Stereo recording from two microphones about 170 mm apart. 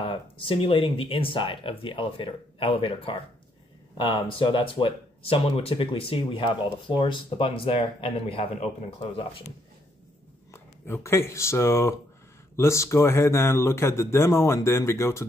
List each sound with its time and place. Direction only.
0.0 s speech: 30° left (ahead or behind)
10.5 s speech: 15° left (ahead or behind)